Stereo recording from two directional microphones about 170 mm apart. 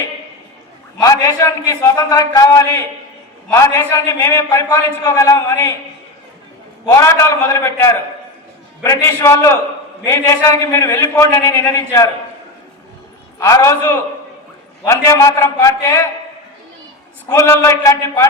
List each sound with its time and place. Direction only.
1.0 s a man's voice: 20° left (ahead or behind)
6.8 s a man's voice: 20° left (ahead or behind)
13.4 s a man's voice: 20° left (ahead or behind)
17.2 s a man's voice: 15° left (ahead or behind)